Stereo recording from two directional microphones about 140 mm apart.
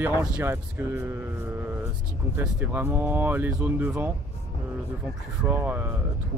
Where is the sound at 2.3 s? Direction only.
10° right (ahead or behind).